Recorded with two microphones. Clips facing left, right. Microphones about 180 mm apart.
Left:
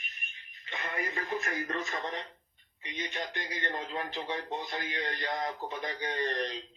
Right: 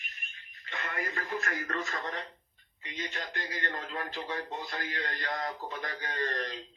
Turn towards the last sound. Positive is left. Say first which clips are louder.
# left 2 dB
turn(degrees=20)  # may be behind; listen again after turning